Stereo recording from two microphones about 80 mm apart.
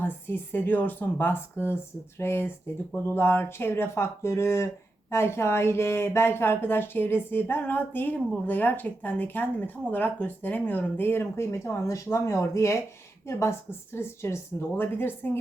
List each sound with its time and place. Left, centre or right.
0.0 s speech: left